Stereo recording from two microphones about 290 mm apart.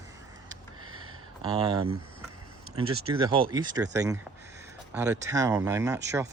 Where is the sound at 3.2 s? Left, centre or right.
Centre.